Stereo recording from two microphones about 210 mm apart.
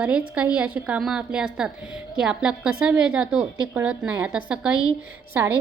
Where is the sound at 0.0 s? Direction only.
5° right (ahead or behind).